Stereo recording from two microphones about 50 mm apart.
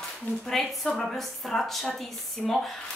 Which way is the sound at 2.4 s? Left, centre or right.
Centre.